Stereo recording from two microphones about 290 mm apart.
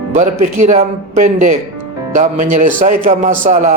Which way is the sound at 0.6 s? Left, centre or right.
Right.